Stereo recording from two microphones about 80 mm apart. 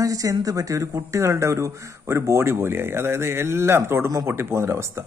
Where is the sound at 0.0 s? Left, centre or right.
Right.